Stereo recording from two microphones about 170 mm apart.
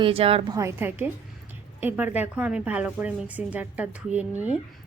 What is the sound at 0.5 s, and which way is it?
A woman's voice, 15° right (ahead or behind).